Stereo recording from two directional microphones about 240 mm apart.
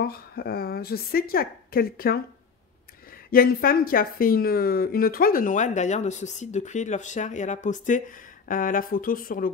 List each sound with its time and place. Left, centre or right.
0.0 s a woman's voice: left
3.3 s a woman's voice: left